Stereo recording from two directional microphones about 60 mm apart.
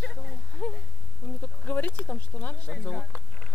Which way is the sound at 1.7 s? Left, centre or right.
Left.